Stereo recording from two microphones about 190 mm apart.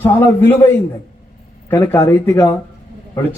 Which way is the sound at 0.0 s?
10° left (ahead or behind).